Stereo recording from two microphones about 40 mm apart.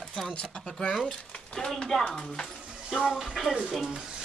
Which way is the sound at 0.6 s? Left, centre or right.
Centre.